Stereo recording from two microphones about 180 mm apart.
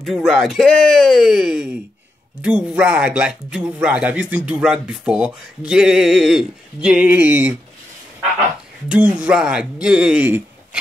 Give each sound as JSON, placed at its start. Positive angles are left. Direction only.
{"t": 0.0, "sound": "speech", "side_deg": 0}
{"t": 8.8, "sound": "speech", "side_deg": -5}